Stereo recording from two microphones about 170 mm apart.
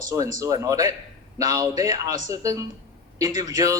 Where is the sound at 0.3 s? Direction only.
20° right (ahead or behind).